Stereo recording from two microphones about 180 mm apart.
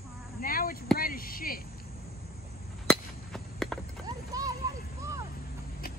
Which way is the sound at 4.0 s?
20° right (ahead or behind).